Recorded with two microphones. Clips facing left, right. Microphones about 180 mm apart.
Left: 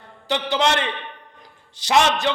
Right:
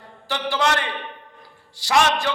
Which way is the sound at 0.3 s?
20° left (ahead or behind).